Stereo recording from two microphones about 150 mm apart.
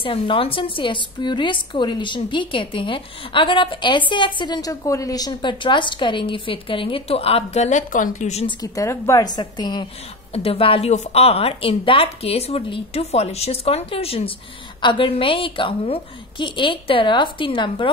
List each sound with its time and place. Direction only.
0.0 s a woman's voice: 35° left (ahead or behind)
8.5 s a woman's voice: 25° left (ahead or behind)
10.3 s a woman's voice: 40° left (ahead or behind)